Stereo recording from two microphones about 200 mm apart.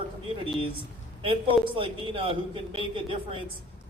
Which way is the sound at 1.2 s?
25° right (ahead or behind).